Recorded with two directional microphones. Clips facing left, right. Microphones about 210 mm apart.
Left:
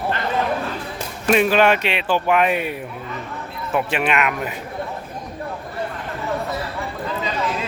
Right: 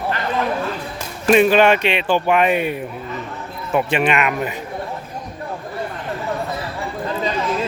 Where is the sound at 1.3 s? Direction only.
Centre (ahead or behind).